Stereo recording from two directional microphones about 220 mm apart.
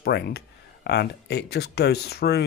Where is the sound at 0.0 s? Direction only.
45° left (ahead or behind).